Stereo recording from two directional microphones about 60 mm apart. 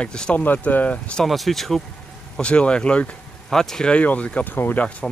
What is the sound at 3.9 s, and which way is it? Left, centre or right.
Speech, left.